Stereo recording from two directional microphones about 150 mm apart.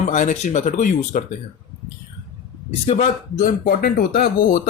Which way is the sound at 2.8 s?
55° left (ahead or behind).